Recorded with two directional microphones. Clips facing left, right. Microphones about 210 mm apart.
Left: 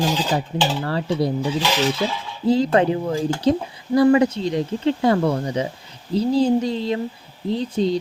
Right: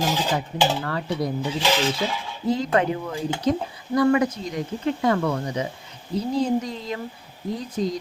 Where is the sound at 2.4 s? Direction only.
30° left (ahead or behind).